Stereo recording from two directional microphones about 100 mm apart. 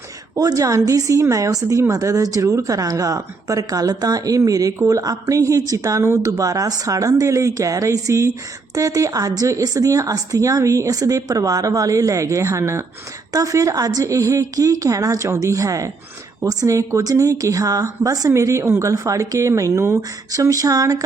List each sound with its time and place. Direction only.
0.3 s a woman's voice: 40° right (ahead or behind)